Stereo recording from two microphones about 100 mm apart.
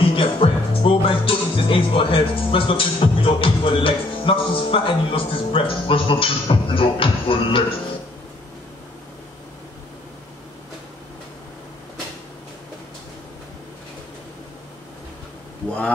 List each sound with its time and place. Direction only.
0.0 s music: 60° left (ahead or behind)